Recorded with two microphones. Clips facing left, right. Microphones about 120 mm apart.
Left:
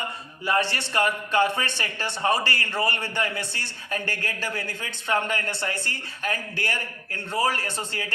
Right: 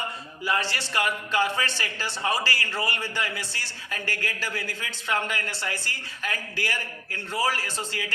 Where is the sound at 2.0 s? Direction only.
55° left (ahead or behind).